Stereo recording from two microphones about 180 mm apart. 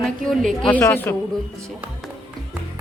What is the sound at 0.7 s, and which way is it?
Speech, 10° left (ahead or behind).